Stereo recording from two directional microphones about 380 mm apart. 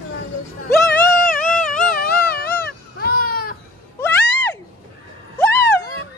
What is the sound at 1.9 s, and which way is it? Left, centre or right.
Baby cry, left.